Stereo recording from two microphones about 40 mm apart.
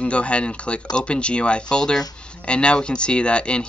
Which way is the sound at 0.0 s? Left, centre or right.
Left.